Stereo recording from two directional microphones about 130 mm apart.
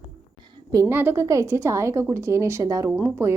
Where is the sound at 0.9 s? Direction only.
15° right (ahead or behind).